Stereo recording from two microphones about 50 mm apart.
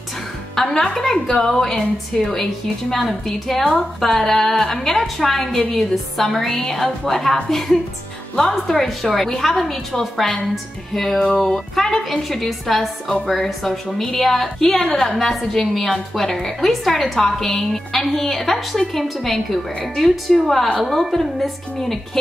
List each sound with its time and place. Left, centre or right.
0.6 s a woman's voice: centre
8.4 s a woman's voice: centre
8.8 s speech: centre
14.8 s a woman's voice: centre
15.1 s speech: centre